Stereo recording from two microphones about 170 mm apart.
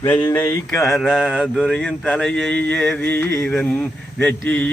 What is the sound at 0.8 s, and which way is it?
Mantra, centre (ahead or behind).